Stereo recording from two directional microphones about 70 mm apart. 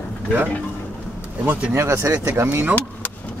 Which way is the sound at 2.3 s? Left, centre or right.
Right.